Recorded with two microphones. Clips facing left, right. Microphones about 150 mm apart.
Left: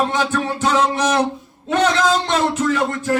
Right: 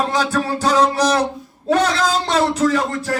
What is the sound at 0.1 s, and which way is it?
Speech, 35° right (ahead or behind).